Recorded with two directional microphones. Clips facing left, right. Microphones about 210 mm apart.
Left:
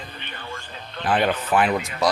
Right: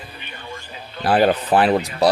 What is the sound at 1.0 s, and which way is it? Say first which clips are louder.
Speech: right 5 dB; 35° right (ahead or behind).